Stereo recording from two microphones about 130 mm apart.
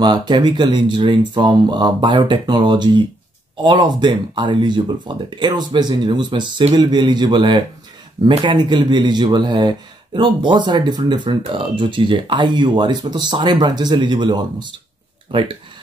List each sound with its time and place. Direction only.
0.0 s speech: 35° right (ahead or behind)